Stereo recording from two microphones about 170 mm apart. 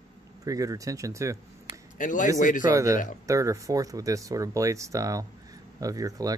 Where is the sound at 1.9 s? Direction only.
50° left (ahead or behind).